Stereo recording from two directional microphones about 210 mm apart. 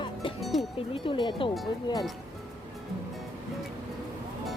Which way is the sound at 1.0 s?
25° left (ahead or behind).